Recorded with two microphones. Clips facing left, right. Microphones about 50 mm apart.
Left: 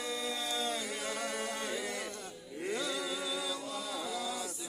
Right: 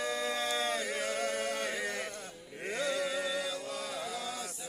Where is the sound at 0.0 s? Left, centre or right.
Right.